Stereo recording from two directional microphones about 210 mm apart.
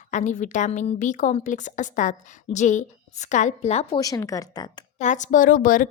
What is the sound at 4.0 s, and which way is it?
Speech, 15° left (ahead or behind).